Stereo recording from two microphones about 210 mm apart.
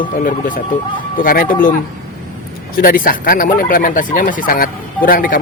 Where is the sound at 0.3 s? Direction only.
40° left (ahead or behind).